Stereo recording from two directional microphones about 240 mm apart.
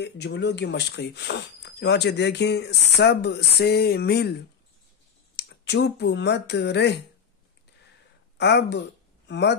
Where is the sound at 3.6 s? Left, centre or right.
Left.